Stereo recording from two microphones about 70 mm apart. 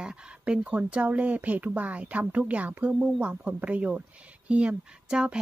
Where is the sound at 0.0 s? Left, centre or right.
Centre.